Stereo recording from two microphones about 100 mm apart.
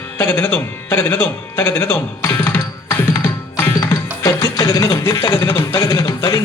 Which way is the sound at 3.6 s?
25° left (ahead or behind).